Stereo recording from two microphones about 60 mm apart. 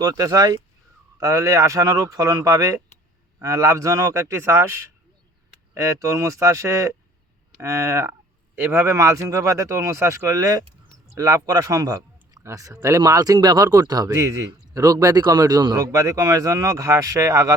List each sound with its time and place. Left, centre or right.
0.0 s speech: right
1.2 s a man's voice: right
8.9 s speech: right
11.1 s speech: right
11.4 s speech: right
14.1 s a man's voice: right
14.7 s speech: right